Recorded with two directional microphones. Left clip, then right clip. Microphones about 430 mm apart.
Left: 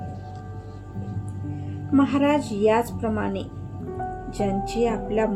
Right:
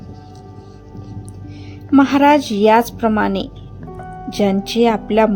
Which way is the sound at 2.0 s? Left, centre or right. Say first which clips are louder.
Right 9 dB; right.